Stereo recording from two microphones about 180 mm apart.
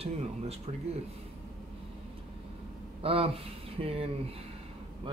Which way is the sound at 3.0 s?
30° right (ahead or behind).